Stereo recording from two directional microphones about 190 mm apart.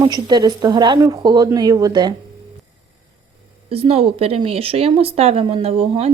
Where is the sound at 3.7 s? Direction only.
30° right (ahead or behind).